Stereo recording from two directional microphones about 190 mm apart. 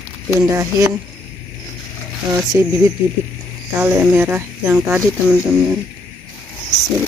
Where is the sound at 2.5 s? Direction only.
10° right (ahead or behind).